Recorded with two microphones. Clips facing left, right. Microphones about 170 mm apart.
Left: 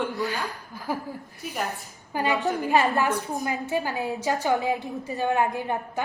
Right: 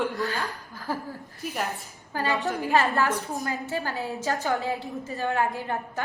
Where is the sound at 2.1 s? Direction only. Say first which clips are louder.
Left 2 dB; 15° left (ahead or behind).